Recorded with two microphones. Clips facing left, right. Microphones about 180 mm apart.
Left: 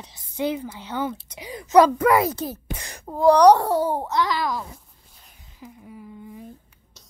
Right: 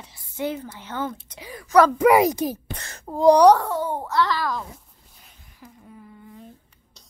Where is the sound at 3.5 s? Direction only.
35° left (ahead or behind).